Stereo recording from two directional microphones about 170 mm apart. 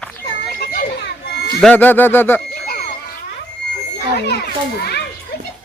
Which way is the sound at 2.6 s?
70° left (ahead or behind).